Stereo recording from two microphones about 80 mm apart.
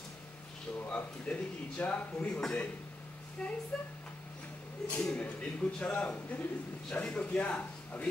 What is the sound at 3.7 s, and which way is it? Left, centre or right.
Speech, centre.